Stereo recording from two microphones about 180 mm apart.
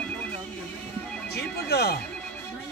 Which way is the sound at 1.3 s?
65° left (ahead or behind).